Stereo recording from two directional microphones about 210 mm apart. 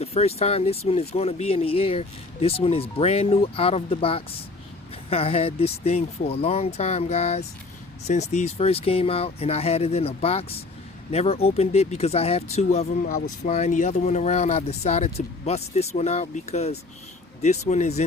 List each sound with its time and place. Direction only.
0.0 s speech: 30° left (ahead or behind)